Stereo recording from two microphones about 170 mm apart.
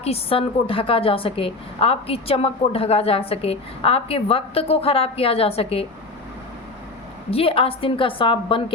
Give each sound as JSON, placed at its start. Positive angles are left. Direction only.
{"t": 0.0, "sound": "a woman's voice", "side_deg": 35}
{"t": 7.3, "sound": "a woman's voice", "side_deg": 35}